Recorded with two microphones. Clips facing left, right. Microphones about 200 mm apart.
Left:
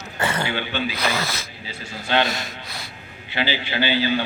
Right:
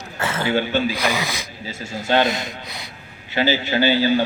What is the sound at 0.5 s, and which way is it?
Speech, 45° right (ahead or behind).